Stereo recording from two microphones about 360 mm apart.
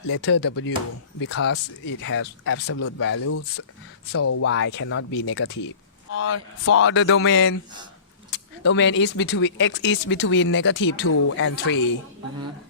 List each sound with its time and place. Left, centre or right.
0.1 s speech: left